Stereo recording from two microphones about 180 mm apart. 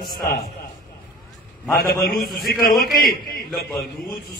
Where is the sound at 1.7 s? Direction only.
55° left (ahead or behind).